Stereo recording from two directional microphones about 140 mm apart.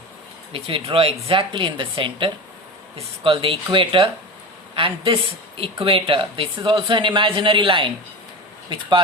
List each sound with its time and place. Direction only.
0.5 s speech: 40° right (ahead or behind)